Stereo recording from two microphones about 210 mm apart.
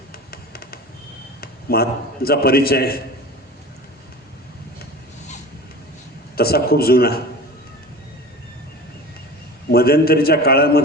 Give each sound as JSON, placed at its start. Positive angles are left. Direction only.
{"t": 0.3, "sound": "music", "side_deg": 45}
{"t": 1.4, "sound": "a man's voice", "side_deg": 45}
{"t": 6.3, "sound": "a man's voice", "side_deg": 45}
{"t": 9.7, "sound": "a man's voice", "side_deg": 45}